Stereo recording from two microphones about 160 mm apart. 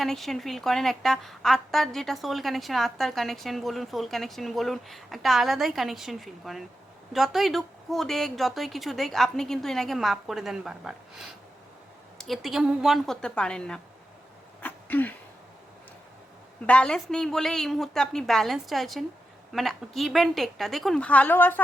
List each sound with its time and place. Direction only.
0.0 s a woman's voice: centre (ahead or behind)
14.6 s a sound: 10° left (ahead or behind)
16.6 s a woman's voice: 5° left (ahead or behind)